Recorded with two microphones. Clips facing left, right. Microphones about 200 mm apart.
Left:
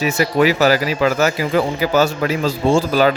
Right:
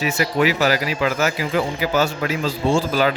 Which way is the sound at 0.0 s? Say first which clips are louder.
Left 4 dB; 40° left (ahead or behind).